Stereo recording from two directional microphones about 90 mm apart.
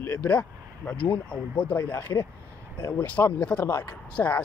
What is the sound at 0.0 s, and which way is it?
A man's voice, 20° left (ahead or behind).